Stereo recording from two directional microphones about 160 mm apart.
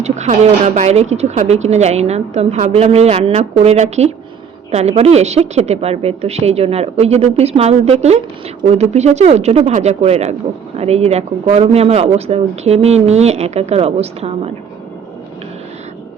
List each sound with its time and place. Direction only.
0.0 s speech: 45° right (ahead or behind)